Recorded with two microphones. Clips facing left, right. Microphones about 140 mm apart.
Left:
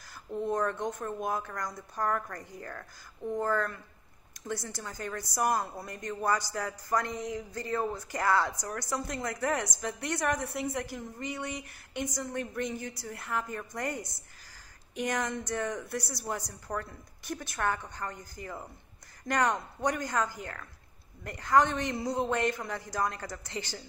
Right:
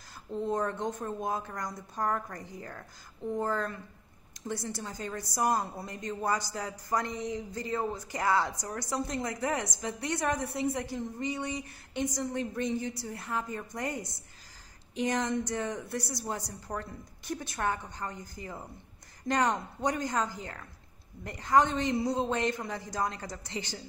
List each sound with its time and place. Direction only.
0.5 s a woman's voice: 20° right (ahead or behind)